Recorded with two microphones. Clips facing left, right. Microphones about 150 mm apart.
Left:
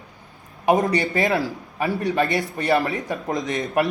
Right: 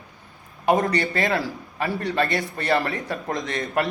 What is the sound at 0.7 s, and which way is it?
Speech, 20° left (ahead or behind).